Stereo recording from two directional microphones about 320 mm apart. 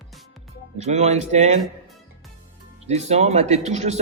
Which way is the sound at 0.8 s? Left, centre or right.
Right.